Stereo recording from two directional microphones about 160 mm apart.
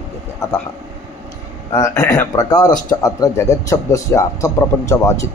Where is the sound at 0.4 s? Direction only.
15° left (ahead or behind).